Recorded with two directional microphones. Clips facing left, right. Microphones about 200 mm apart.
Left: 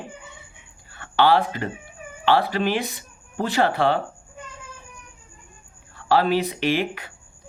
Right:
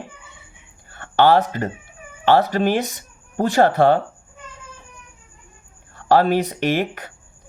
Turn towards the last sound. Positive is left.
turn(degrees=-45)  # may be behind; listen again after turning